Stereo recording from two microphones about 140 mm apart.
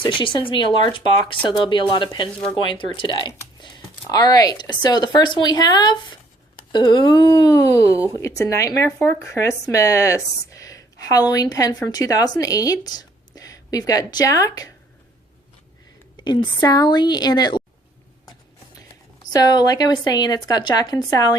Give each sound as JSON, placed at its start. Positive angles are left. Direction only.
{"t": 0.0, "sound": "speech", "side_deg": 35}
{"t": 16.1, "sound": "speech", "side_deg": 35}
{"t": 19.2, "sound": "speech", "side_deg": 25}